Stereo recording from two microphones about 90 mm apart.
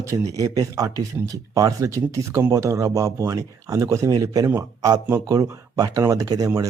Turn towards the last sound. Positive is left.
turn(degrees=-40)  # may be behind; listen again after turning